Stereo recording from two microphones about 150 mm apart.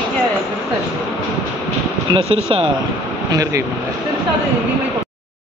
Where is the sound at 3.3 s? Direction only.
25° right (ahead or behind).